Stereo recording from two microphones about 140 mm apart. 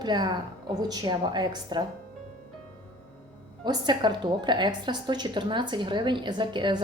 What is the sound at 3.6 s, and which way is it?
A woman's voice, 30° right (ahead or behind).